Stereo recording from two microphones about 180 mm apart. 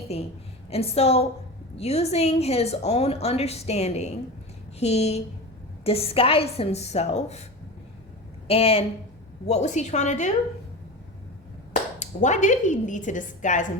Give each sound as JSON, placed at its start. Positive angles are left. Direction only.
{"t": 0.7, "sound": "a woman's voice", "side_deg": 35}
{"t": 8.4, "sound": "a woman's voice", "side_deg": 35}
{"t": 11.7, "sound": "a woman's voice", "side_deg": 40}